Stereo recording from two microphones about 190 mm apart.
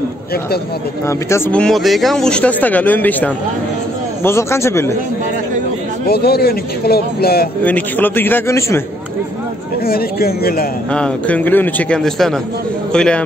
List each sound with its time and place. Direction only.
1.0 s speech: 15° left (ahead or behind)
6.0 s speech: 55° left (ahead or behind)
7.6 s speech: 10° left (ahead or behind)
9.8 s speech: 50° left (ahead or behind)
10.9 s a man's voice: 5° left (ahead or behind)